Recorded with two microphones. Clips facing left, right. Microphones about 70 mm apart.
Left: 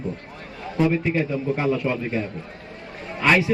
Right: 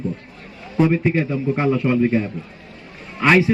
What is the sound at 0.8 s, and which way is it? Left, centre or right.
A man's voice, right.